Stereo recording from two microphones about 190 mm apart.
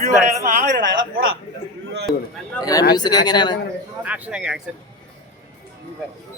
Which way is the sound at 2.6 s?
20° left (ahead or behind).